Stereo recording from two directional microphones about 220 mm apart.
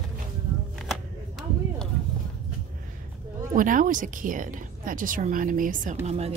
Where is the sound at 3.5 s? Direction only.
35° right (ahead or behind).